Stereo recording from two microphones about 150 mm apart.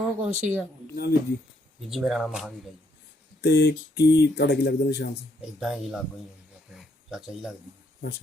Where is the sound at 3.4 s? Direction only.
90° left.